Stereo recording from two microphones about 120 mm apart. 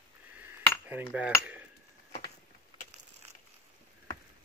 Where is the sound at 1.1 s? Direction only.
10° right (ahead or behind).